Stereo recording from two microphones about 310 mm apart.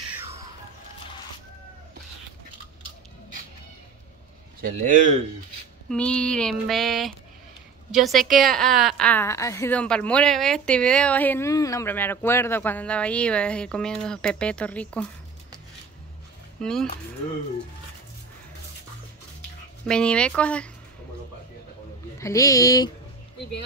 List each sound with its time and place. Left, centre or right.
4.6 s a man's voice: right
5.9 s a woman's voice: centre
16.6 s a woman's voice: centre
19.9 s a woman's voice: centre
22.2 s speech: centre